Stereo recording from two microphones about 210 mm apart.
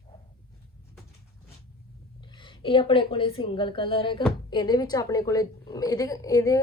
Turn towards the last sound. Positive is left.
turn(degrees=15)  # may be behind; listen again after turning